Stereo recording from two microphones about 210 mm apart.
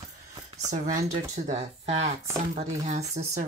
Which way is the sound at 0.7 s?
40° right (ahead or behind).